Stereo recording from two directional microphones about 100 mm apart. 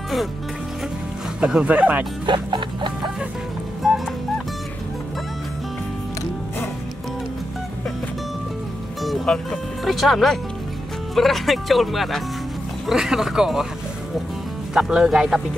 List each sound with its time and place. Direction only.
1.4 s speech: 10° right (ahead or behind)
2.2 s music: 50° right (ahead or behind)
3.8 s music: centre (ahead or behind)
9.0 s speech: 5° left (ahead or behind)
14.7 s speech: 5° right (ahead or behind)